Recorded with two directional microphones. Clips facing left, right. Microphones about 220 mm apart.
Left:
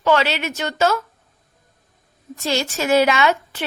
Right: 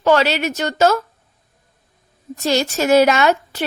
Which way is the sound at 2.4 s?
40° right (ahead or behind).